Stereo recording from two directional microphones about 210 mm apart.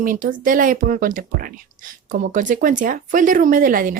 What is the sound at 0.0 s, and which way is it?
Speech, 40° right (ahead or behind).